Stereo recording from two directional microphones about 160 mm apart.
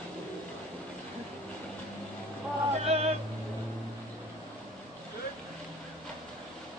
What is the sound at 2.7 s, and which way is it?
Vehicle, 40° right (ahead or behind).